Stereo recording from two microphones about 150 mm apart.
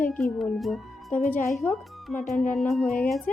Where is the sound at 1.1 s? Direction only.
10° left (ahead or behind).